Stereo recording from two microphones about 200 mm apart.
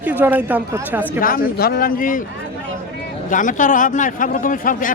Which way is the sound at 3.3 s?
40° left (ahead or behind).